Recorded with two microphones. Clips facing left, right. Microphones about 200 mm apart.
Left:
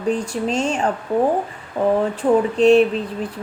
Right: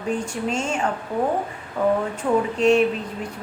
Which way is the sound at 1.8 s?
25° left (ahead or behind).